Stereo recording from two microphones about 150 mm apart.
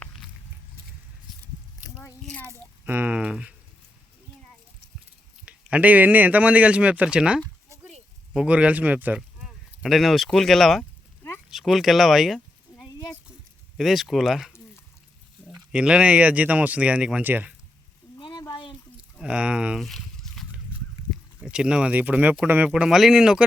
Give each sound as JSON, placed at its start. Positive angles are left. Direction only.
{"t": 2.0, "sound": "a child's voice", "side_deg": 10}
{"t": 2.5, "sound": "speech", "side_deg": -15}
{"t": 5.5, "sound": "speech", "side_deg": -10}
{"t": 18.2, "sound": "a sound", "side_deg": 30}
{"t": 19.2, "sound": "a sound", "side_deg": -5}
{"t": 21.1, "sound": "speech", "side_deg": -5}